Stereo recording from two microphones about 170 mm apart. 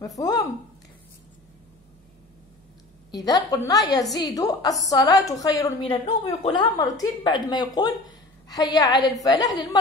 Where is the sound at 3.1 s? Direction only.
20° left (ahead or behind).